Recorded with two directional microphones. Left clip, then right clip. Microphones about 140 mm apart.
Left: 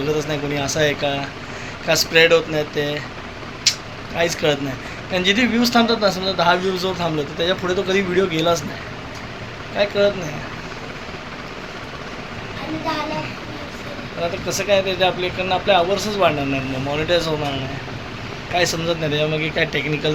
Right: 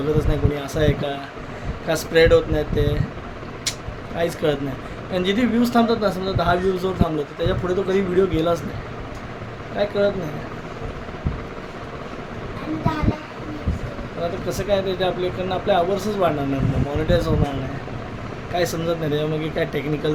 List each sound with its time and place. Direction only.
0.1 s speech: 20° right (ahead or behind)
3.7 s vehicle: 20° right (ahead or behind)
4.2 s a man's voice: 20° right (ahead or behind)
9.7 s speech: 20° right (ahead or behind)
14.2 s speech: 20° right (ahead or behind)
18.5 s speech: 20° right (ahead or behind)